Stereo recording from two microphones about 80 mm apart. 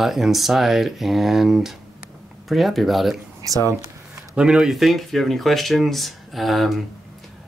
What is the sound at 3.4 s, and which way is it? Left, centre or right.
Speech, right.